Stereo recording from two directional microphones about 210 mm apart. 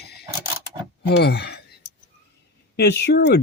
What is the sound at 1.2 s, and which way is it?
Speech, 50° left (ahead or behind).